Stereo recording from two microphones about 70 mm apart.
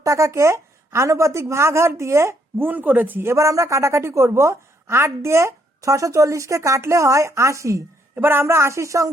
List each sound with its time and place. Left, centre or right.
0.0 s a woman's voice: right
2.6 s speech: right
3.2 s a woman's voice: right
8.1 s speech: right